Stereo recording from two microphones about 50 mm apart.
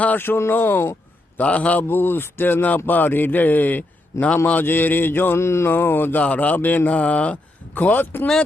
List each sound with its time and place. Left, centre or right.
0.2 s speech: left
1.4 s speech: left
1.9 s speech: left
4.6 s speech: left
5.4 s mantra: left
5.7 s speech: left
6.1 s speech: left
7.8 s speech: left